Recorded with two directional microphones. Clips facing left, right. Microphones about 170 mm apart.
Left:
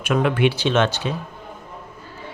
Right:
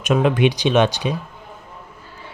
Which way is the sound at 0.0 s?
20° right (ahead or behind).